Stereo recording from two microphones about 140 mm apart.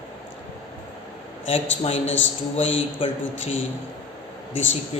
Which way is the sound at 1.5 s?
45° left (ahead or behind).